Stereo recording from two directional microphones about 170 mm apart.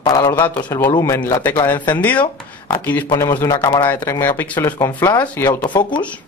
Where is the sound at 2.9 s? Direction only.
10° left (ahead or behind).